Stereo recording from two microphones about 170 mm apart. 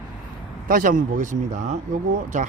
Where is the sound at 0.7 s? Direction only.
55° right (ahead or behind).